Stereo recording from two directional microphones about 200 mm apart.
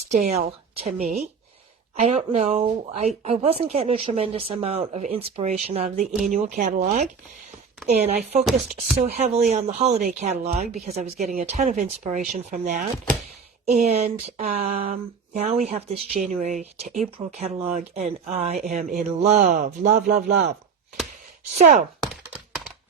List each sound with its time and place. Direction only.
0.1 s speech: 35° right (ahead or behind); by 20.5 s 50° right (ahead or behind)
22.0 s computer keyboard: centre (ahead or behind)